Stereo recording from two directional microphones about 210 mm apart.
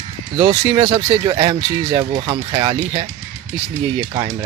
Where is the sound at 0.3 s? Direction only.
25° right (ahead or behind).